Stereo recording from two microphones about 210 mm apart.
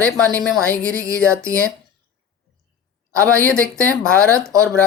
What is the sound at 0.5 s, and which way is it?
Speech, 5° left (ahead or behind).